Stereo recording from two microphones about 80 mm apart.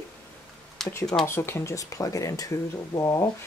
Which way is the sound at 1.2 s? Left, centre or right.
Left.